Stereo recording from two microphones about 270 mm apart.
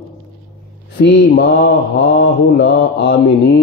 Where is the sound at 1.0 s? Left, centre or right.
Left.